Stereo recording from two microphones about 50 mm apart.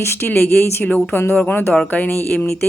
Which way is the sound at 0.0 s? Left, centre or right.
Left.